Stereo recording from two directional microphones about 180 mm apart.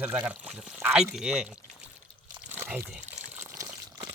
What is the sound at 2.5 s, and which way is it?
Water, 10° right (ahead or behind).